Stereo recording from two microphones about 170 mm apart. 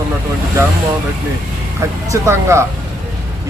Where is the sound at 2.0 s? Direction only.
15° right (ahead or behind).